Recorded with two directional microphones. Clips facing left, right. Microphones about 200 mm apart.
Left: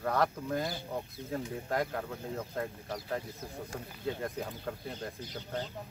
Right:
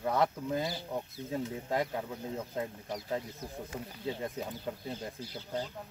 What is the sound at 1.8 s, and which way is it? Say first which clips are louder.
Speech: even; 10° right (ahead or behind).